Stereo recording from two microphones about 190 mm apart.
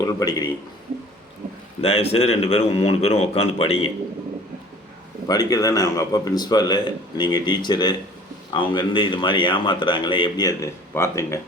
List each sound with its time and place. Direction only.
0.0 s a man's voice: 20° left (ahead or behind)
1.8 s a man's voice: 30° left (ahead or behind)
5.3 s a man's voice: 20° left (ahead or behind)